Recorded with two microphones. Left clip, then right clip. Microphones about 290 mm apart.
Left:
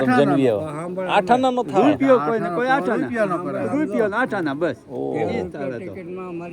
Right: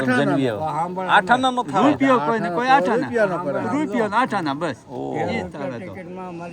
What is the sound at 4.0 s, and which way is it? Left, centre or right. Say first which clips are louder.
Speech: right 2 dB; right.